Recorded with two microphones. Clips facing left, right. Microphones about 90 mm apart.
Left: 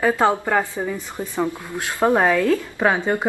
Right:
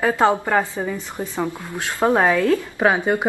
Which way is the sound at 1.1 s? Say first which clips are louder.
Left 1 dB; 20° right (ahead or behind).